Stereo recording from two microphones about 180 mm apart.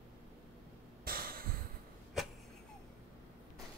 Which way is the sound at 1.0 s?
55° right (ahead or behind).